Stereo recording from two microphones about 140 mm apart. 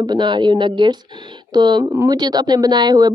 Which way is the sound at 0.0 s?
30° right (ahead or behind).